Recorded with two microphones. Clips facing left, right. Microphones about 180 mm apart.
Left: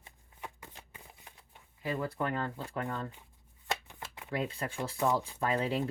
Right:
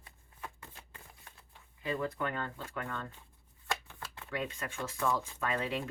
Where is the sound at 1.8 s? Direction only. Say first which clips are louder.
Left 1 dB; 30° left (ahead or behind).